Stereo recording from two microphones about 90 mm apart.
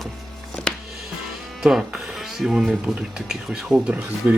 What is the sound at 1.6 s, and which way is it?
Speech, 5° right (ahead or behind).